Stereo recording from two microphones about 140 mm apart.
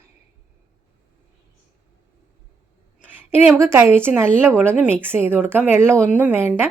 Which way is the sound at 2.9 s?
15° right (ahead or behind).